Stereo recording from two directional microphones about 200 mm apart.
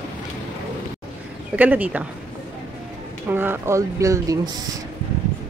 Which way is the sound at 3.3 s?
10° right (ahead or behind).